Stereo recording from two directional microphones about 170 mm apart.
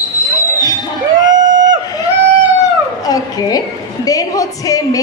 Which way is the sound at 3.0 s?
20° left (ahead or behind).